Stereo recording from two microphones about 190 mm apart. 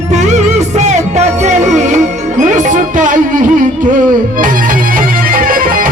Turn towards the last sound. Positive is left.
turn(degrees=-45)  # may be behind; listen again after turning